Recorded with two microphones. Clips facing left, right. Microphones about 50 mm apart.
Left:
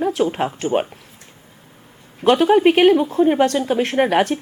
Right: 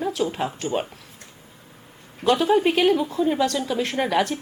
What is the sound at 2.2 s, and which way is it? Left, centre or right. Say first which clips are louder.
A woman's voice: left 5 dB; left.